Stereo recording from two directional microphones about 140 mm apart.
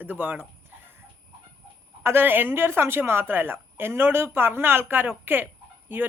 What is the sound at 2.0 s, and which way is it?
A woman's voice, 15° right (ahead or behind).